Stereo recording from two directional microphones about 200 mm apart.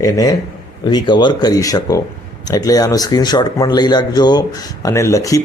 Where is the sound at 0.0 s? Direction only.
20° left (ahead or behind).